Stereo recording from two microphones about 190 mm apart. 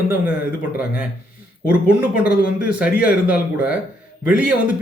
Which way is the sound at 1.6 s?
5° right (ahead or behind).